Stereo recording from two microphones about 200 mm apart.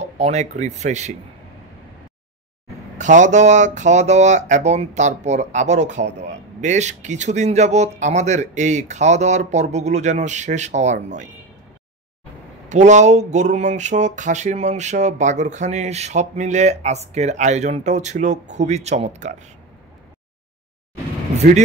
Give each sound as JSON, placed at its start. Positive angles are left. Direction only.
{"t": 0.0, "sound": "speech", "side_deg": -35}
{"t": 3.0, "sound": "speech", "side_deg": -35}
{"t": 12.6, "sound": "speech", "side_deg": -35}